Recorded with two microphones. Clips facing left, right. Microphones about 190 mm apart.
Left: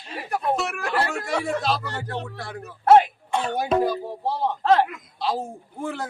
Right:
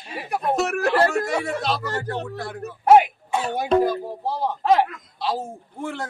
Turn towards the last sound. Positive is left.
turn(degrees=0)  # may be behind; listen again after turning